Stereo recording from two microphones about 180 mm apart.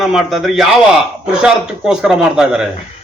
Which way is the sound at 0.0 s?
Centre (ahead or behind).